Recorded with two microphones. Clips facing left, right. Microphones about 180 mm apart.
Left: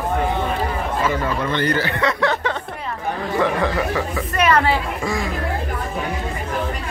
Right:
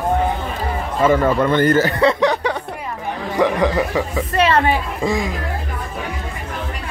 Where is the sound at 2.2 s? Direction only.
15° right (ahead or behind).